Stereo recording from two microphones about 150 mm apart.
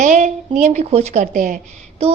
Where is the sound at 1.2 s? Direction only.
65° right (ahead or behind).